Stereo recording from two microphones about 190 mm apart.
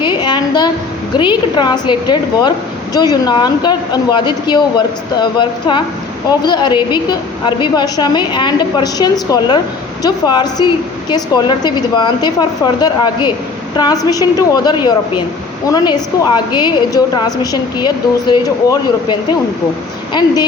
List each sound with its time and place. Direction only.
0.0 s a sound: 25° left (ahead or behind)
1.1 s a woman's voice: 25° left (ahead or behind)
20.2 s a woman's voice: 25° left (ahead or behind)